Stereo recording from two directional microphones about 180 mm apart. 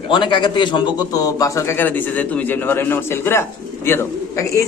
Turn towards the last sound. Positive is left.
turn(degrees=15)  # may be behind; listen again after turning